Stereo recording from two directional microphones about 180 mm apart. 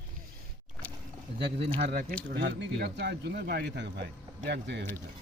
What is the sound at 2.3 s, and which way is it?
A man's voice, 70° right (ahead or behind).